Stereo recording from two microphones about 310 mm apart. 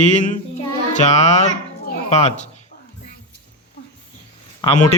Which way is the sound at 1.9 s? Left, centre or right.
Left.